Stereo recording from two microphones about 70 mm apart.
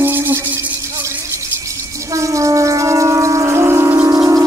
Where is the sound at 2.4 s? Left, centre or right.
Right.